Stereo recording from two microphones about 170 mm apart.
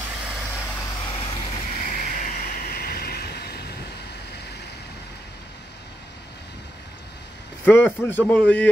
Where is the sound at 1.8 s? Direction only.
55° left (ahead or behind); by 3.7 s 70° left (ahead or behind).